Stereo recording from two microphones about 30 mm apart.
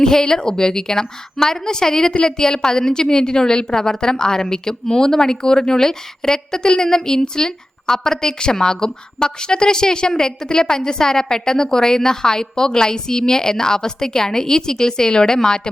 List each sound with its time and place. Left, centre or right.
0.0 s a woman's voice: left